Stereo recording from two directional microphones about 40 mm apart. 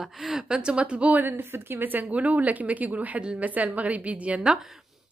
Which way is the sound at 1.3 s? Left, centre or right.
Right.